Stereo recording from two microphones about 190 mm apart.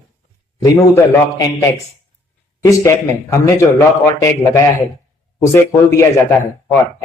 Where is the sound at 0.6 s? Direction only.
15° left (ahead or behind).